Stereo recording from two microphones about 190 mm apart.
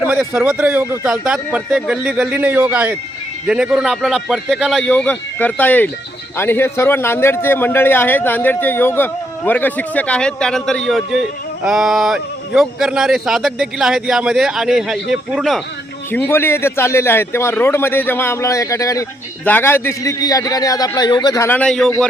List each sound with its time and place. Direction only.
0.0 s a man's voice: 5° right (ahead or behind)
16.1 s a man's voice: 10° left (ahead or behind)